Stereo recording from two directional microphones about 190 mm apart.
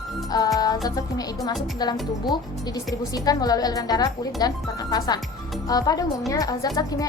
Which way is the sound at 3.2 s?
20° left (ahead or behind).